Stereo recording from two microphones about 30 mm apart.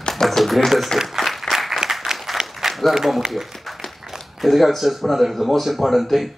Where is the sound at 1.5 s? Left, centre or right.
Centre.